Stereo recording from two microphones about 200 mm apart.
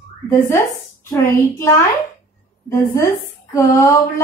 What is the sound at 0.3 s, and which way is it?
A woman's voice, 15° left (ahead or behind).